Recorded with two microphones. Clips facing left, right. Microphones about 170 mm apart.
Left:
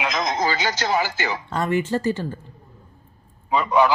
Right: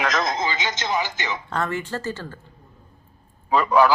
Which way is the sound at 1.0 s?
20° right (ahead or behind).